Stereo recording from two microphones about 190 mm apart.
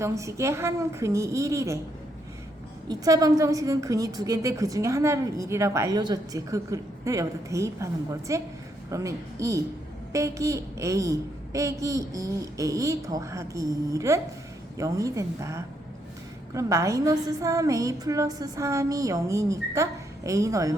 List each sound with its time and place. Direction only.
0.0 s a woman's voice: 15° right (ahead or behind)
2.9 s a woman's voice: 20° right (ahead or behind)